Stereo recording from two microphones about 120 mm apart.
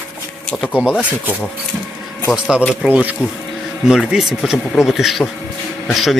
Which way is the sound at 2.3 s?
5° right (ahead or behind).